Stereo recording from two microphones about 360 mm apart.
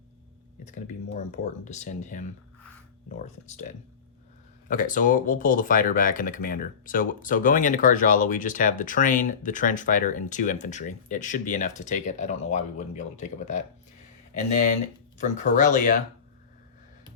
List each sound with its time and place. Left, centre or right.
0.6 s speech: centre
3.2 s speech: centre